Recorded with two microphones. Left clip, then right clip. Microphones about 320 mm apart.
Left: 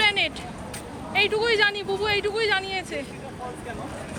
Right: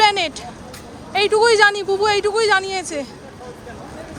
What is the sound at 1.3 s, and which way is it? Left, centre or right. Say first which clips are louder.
Speech: right 8 dB; centre.